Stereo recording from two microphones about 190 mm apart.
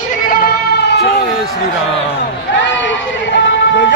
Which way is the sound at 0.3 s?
60° left (ahead or behind).